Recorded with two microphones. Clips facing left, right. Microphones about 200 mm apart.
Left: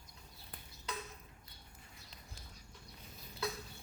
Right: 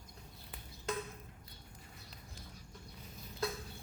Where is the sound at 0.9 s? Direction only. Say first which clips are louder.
Right 6 dB; 50° right (ahead or behind).